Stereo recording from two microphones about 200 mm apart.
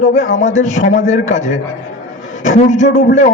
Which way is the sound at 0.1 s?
35° left (ahead or behind).